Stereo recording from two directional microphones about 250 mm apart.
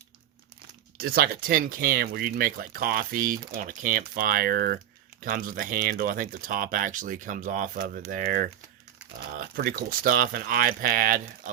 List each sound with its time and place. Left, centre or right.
0.9 s speech: right